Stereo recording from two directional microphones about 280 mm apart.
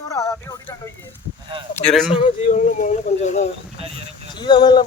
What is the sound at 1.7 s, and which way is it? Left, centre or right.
Speech, centre.